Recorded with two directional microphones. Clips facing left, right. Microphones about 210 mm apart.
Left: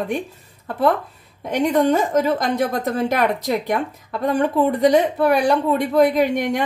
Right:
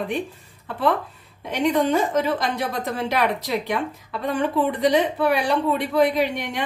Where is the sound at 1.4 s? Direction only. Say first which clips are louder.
Left 3 dB; 45° left (ahead or behind).